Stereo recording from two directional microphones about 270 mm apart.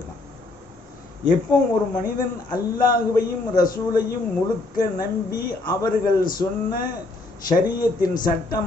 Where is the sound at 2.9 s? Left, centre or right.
Left.